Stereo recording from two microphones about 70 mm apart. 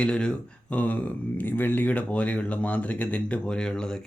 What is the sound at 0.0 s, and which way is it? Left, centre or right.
Speech, centre.